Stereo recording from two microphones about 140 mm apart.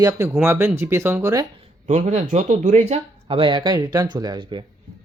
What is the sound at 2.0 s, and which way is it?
Speech, 55° right (ahead or behind).